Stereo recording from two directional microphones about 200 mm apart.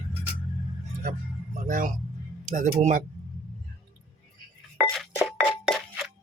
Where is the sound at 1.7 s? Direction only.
45° right (ahead or behind).